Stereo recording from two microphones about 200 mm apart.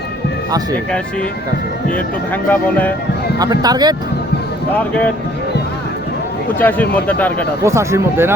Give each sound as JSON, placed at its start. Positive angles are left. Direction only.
{"t": 1.9, "sound": "speech", "side_deg": 10}
{"t": 3.3, "sound": "speech", "side_deg": -20}
{"t": 6.6, "sound": "speech", "side_deg": 10}
{"t": 7.6, "sound": "speech", "side_deg": -15}